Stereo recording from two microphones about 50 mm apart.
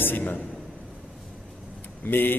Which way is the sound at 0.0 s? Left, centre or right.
Left.